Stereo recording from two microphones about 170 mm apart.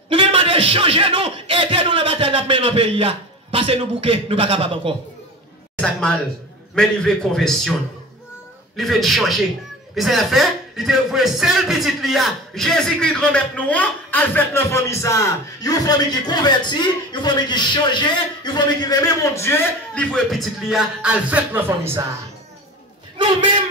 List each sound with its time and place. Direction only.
0.1 s speech: 30° right (ahead or behind)
5.8 s a man's voice: 5° left (ahead or behind)
8.7 s a man's voice: centre (ahead or behind)
23.1 s a man's voice: 30° right (ahead or behind)